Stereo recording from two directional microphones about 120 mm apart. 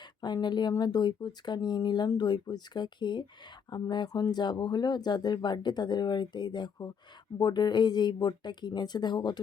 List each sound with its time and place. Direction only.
0.2 s speech: 35° left (ahead or behind)